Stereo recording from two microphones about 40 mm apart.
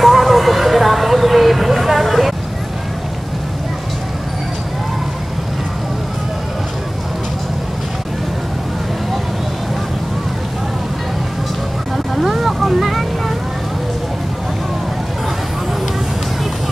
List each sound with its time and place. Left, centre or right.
0.0 s vehicle: centre
12.2 s music: centre